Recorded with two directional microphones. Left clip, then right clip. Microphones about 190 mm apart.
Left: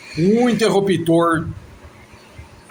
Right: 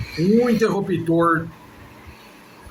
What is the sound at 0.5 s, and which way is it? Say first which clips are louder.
Speech: left 4 dB; 45° left (ahead or behind).